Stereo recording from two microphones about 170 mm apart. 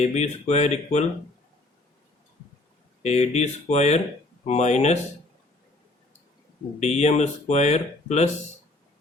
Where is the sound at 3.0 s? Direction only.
40° left (ahead or behind).